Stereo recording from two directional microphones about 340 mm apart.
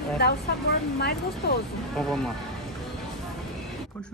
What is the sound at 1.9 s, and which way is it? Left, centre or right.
Speech, centre.